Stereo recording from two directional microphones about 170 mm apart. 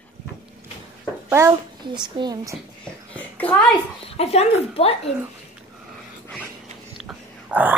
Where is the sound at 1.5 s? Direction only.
25° right (ahead or behind).